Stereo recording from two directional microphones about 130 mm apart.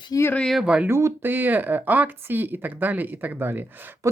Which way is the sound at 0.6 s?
5° right (ahead or behind).